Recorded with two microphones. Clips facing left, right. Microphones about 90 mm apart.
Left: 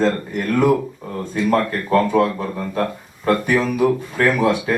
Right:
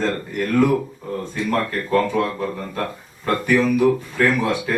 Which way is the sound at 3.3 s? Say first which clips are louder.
Even; 20° left (ahead or behind).